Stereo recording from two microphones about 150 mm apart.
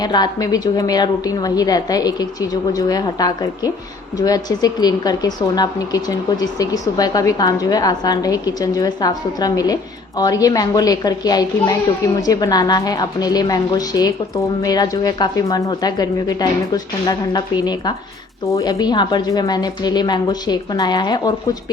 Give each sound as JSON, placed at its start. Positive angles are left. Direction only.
{"t": 0.0, "sound": "speech", "side_deg": 30}